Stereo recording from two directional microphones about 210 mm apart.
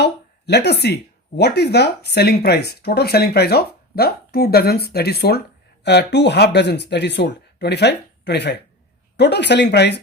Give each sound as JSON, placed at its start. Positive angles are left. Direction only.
{"t": 0.0, "sound": "speech", "side_deg": 50}